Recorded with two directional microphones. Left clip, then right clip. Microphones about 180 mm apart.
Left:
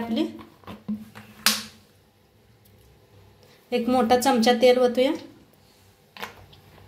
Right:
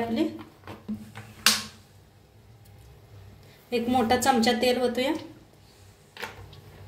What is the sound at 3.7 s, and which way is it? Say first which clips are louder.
A woman's voice: left 3 dB; 35° left (ahead or behind).